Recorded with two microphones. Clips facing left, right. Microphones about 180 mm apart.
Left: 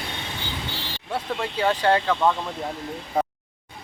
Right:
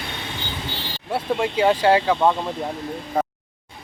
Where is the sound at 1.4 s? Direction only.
10° right (ahead or behind).